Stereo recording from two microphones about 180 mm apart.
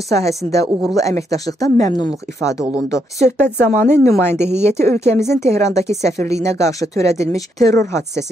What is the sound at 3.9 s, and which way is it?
Speech, 15° left (ahead or behind).